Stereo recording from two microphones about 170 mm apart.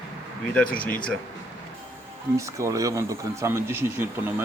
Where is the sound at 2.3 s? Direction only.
20° right (ahead or behind).